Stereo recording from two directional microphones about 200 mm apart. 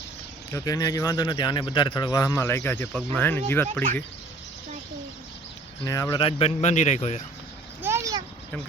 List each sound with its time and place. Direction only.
0.5 s speech: 15° left (ahead or behind)
5.8 s speech: 15° left (ahead or behind); by 7.2 s 35° left (ahead or behind)
7.8 s vehicle: 15° right (ahead or behind)